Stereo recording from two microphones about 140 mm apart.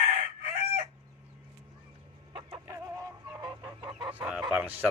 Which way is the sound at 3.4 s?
30° right (ahead or behind).